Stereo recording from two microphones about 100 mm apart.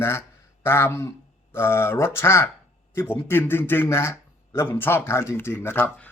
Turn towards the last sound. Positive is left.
turn(degrees=20)  # may be behind; listen again after turning